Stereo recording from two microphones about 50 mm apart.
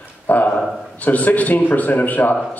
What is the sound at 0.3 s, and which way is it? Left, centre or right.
Speech, left.